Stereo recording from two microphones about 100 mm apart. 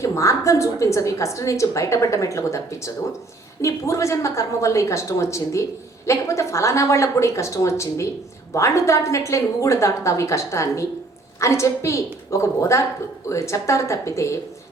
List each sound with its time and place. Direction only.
0.0 s a woman's voice: 30° left (ahead or behind)